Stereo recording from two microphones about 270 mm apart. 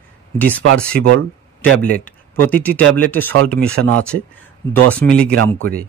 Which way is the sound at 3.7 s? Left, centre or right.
Right.